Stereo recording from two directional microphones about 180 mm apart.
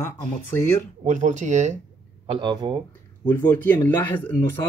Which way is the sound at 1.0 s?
40° right (ahead or behind).